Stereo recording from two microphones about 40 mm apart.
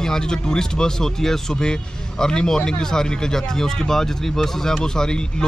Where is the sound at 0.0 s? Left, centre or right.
Centre.